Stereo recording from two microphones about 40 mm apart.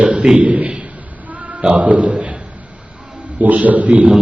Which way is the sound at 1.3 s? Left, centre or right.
Right.